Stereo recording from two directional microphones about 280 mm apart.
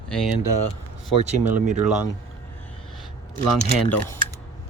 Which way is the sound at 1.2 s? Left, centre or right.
Right.